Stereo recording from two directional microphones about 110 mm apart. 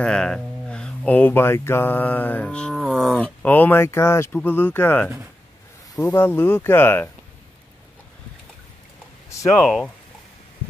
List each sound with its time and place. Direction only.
0.0 s speech: 10° left (ahead or behind)
2.7 s speech: 5° right (ahead or behind)
3.2 s speech: 15° left (ahead or behind)
6.0 s speech: 20° left (ahead or behind)
9.3 s speech: 25° left (ahead or behind)
9.6 s speech: centre (ahead or behind)